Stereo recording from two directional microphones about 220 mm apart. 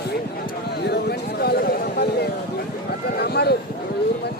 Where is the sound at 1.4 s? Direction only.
45° left (ahead or behind).